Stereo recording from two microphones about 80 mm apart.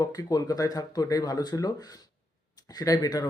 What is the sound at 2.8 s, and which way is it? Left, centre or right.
Speech, left.